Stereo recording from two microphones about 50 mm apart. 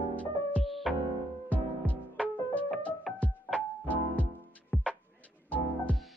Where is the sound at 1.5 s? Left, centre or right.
Left.